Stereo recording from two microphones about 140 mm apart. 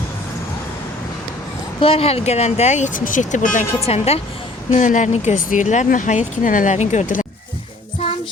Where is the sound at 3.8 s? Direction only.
45° left (ahead or behind); by 7.2 s 65° left (ahead or behind).